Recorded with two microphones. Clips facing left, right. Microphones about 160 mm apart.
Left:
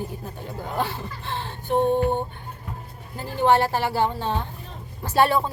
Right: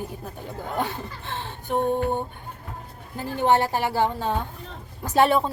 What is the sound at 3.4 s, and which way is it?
A woman's voice, 15° right (ahead or behind).